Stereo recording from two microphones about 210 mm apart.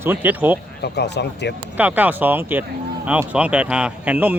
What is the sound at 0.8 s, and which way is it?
Speech, 55° left (ahead or behind).